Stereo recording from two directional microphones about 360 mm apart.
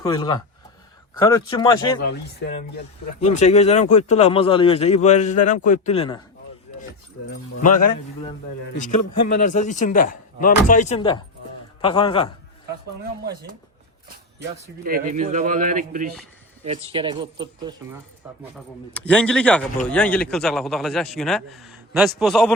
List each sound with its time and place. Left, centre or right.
0.0 s speech: centre
2.0 s speech: left
7.8 s speech: left
9.3 s speech: left
14.5 s speech: right
18.5 s a man's voice: centre